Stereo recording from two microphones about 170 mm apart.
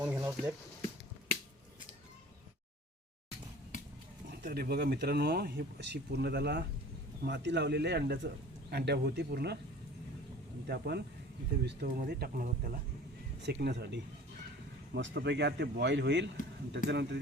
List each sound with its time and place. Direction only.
0.0 s speech: 15° right (ahead or behind)
4.3 s speech: 60° right (ahead or behind)
7.2 s speech: 90° right; by 9.6 s 75° right (ahead or behind)
10.7 s speech: 75° right (ahead or behind)
13.4 s speech: 80° right